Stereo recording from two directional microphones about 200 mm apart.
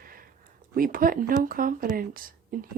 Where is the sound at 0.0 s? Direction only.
45° right (ahead or behind).